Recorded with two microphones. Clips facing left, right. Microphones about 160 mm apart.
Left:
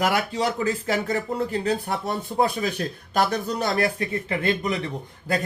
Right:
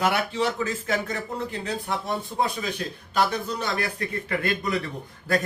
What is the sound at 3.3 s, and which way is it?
Speech, 35° left (ahead or behind).